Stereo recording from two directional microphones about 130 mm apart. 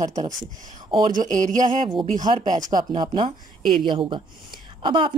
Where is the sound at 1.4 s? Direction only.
75° right (ahead or behind).